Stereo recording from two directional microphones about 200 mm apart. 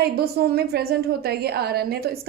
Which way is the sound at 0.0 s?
50° right (ahead or behind).